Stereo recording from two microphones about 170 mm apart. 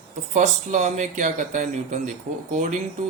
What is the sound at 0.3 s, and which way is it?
Speech, 45° right (ahead or behind).